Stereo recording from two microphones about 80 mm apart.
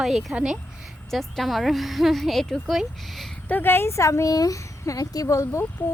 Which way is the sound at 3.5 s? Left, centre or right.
Left.